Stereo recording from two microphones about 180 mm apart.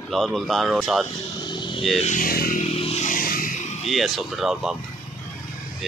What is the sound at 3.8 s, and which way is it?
Speech, centre (ahead or behind).